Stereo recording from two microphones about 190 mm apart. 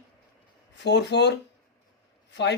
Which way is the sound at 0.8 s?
65° left (ahead or behind).